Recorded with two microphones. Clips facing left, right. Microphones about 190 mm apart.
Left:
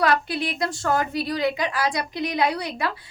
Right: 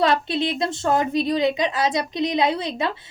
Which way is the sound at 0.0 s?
25° right (ahead or behind).